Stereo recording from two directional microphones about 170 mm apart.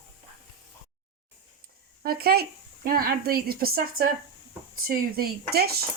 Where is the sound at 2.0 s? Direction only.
65° right (ahead or behind).